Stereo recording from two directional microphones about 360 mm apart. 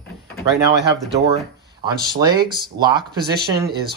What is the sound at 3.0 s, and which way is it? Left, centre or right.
Speech, right.